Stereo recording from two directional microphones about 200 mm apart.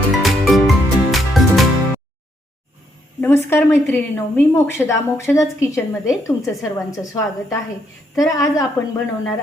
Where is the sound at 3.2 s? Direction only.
10° left (ahead or behind).